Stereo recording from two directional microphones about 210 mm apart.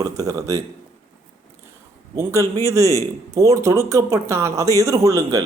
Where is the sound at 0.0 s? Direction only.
15° right (ahead or behind).